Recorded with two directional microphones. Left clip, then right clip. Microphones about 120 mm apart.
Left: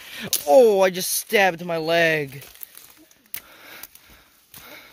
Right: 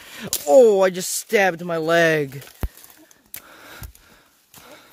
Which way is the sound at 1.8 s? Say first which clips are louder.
Right 2 dB; 75° right (ahead or behind).